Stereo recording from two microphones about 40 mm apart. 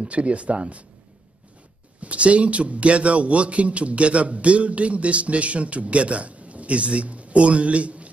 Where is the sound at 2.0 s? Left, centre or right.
Right.